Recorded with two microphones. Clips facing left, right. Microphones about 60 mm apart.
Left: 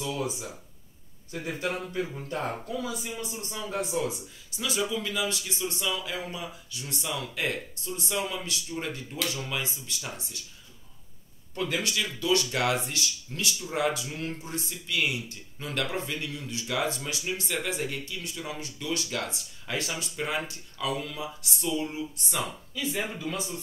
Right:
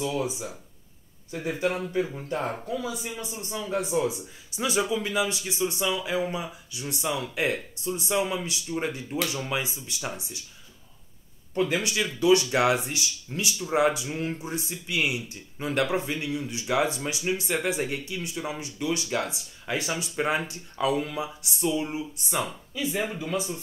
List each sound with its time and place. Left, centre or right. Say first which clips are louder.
0.0 s speech: right 3 dB; centre
1.3 s speech: right 4 dB; centre
4.6 s speech: right 4 dB; right
11.5 s speech: right 4 dB; centre
20.2 s speech: right 5 dB; right; by 23.6 s centre